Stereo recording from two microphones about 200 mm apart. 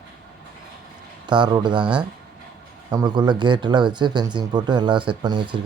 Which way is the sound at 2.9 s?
20° right (ahead or behind).